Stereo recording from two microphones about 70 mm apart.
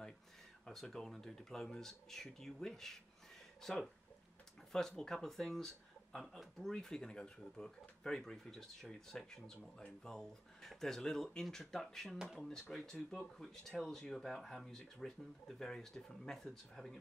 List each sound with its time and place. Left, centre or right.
0.7 s speech: centre